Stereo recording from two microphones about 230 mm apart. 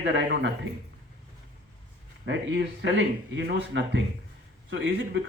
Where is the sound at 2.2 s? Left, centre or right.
Right.